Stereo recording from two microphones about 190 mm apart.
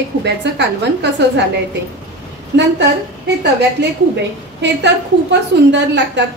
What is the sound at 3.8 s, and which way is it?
A woman's voice, 65° right (ahead or behind).